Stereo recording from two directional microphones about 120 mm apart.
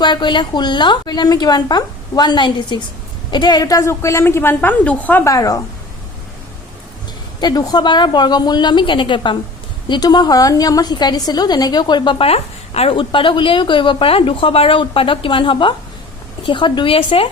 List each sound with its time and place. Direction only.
0.0 s a woman's voice: 40° left (ahead or behind); by 5.2 s 15° left (ahead or behind)
5.2 s a woman's voice: 30° left (ahead or behind)
7.4 s a woman's voice: 30° left (ahead or behind)
12.2 s a woman's voice: 55° left (ahead or behind)